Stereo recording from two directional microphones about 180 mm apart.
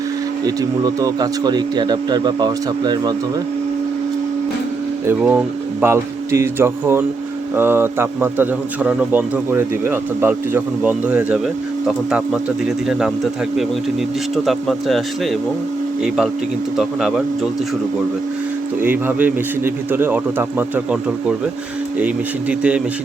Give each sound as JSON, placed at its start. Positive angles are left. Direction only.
{"t": 0.4, "sound": "speech", "side_deg": -20}
{"t": 5.0, "sound": "a man's voice", "side_deg": -10}
{"t": 14.4, "sound": "speech", "side_deg": 0}
{"t": 18.8, "sound": "a man's voice", "side_deg": -10}